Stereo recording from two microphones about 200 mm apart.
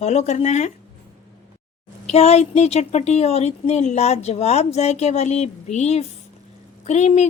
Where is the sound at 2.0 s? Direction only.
30° left (ahead or behind).